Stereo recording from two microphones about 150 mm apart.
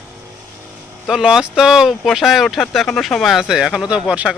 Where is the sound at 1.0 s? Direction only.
5° right (ahead or behind).